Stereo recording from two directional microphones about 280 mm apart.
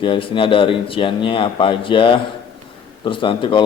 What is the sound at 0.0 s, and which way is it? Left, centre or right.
A man's voice, centre.